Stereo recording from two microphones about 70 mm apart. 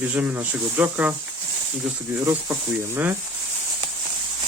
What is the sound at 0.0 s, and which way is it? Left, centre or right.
Speech, right.